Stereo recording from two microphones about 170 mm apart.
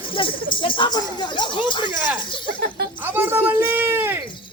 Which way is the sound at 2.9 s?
10° right (ahead or behind).